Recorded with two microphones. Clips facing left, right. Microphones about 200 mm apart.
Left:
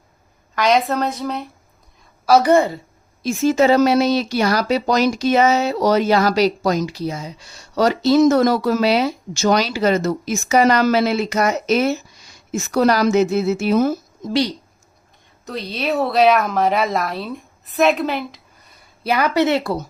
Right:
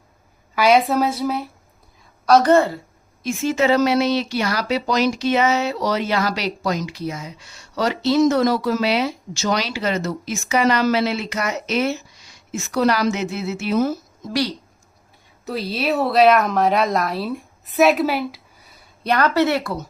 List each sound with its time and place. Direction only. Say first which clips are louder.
0.5 s speech: right 1 dB; 5° right (ahead or behind)
2.2 s a woman's voice: left 1 dB; 5° left (ahead or behind)
3.2 s speech: left 4 dB; 40° left (ahead or behind)
15.4 s speech: right 1 dB; 5° right (ahead or behind); by 19.8 s 25° left (ahead or behind)